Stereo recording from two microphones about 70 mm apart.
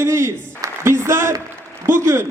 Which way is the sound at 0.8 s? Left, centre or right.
Right.